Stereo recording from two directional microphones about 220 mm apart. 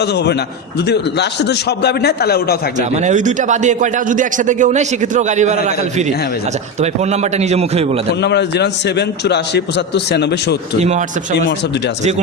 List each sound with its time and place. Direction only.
0.0 s a man's voice: 50° left (ahead or behind)
2.9 s a man's voice: 30° right (ahead or behind)
7.0 s a man's voice: 30° right (ahead or behind)
8.2 s a man's voice: 50° left (ahead or behind)
10.8 s a man's voice: 30° right (ahead or behind)